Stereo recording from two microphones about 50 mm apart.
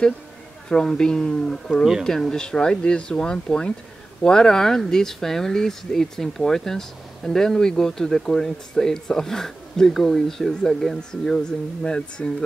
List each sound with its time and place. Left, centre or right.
0.7 s speech: centre